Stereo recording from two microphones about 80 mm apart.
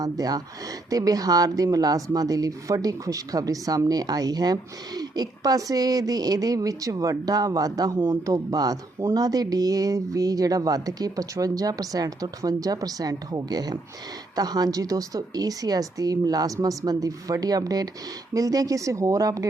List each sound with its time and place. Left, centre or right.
0.0 s a woman's voice: right
7.9 s speech: right
8.2 s a woman's voice: right